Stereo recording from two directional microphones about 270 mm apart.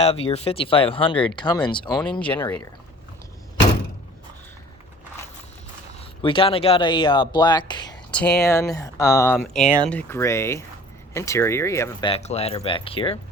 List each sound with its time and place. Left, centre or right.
0.0 s speech: left
2.0 s speech: centre
6.2 s speech: centre
8.1 s speech: centre
9.3 s speech: centre